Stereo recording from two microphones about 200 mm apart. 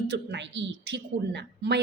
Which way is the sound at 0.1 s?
60° right (ahead or behind).